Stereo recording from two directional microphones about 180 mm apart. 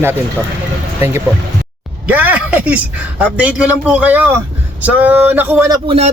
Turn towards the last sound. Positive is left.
turn(degrees=-35)  # may be behind; listen again after turning